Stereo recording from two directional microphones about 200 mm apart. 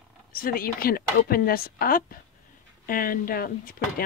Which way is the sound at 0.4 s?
45° left (ahead or behind).